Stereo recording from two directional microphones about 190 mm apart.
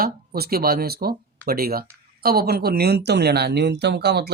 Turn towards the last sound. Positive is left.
turn(degrees=-60)  # may be behind; listen again after turning